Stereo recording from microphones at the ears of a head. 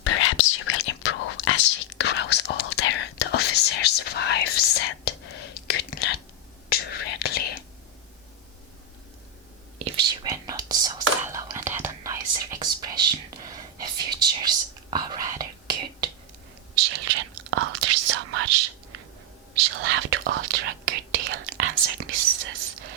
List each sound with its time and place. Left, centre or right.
0.0 s whispering: left
9.7 s whispering: right